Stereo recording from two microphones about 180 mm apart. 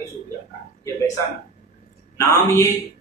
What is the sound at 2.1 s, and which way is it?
Speech, 15° left (ahead or behind).